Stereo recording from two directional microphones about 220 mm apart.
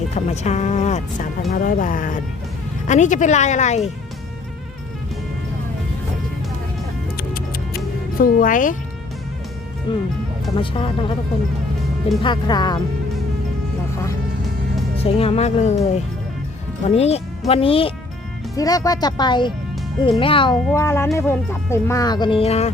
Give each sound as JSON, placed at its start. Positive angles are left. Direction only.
{"t": 0.3, "sound": "speech", "side_deg": 30}
{"t": 7.2, "sound": "music", "side_deg": 40}
{"t": 8.2, "sound": "speech", "side_deg": 40}
{"t": 9.9, "sound": "speech", "side_deg": 20}
{"t": 12.2, "sound": "speech", "side_deg": 20}
{"t": 14.9, "sound": "speech", "side_deg": 25}
{"t": 20.7, "sound": "speech", "side_deg": 10}